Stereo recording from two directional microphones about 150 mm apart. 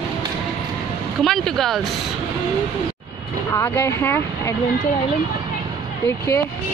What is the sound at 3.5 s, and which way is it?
A woman's voice, 15° left (ahead or behind).